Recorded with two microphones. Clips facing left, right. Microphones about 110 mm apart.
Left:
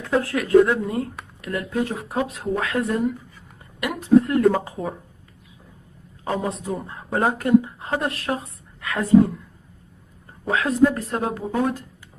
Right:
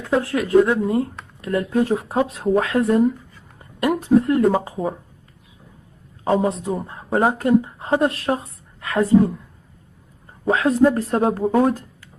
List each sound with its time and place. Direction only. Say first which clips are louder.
0.0 s speech: right 2 dB; 25° right (ahead or behind)
6.2 s speech: right 6 dB; 30° right (ahead or behind)
10.4 s speech: right 3 dB; 30° right (ahead or behind)